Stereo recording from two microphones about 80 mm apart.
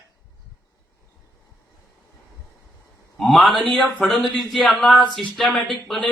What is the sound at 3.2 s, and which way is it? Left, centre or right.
Speech, centre.